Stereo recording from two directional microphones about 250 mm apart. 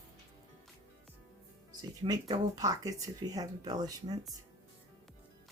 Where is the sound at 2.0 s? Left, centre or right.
Centre.